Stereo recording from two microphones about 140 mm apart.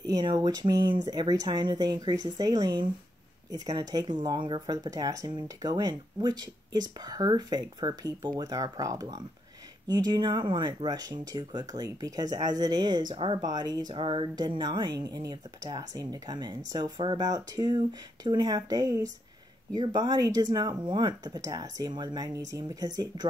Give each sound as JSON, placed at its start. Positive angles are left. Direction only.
{"t": 0.1, "sound": "speech", "side_deg": -30}